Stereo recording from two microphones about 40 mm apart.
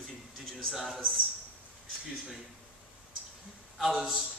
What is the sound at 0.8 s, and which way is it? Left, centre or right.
Speech, centre.